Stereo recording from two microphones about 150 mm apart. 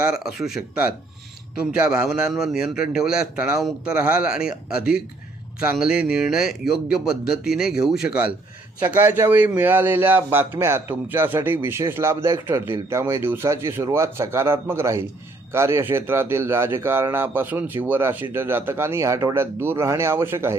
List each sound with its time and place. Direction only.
0.2 s speech: 5° right (ahead or behind)
5.7 s a man's voice: 5° right (ahead or behind)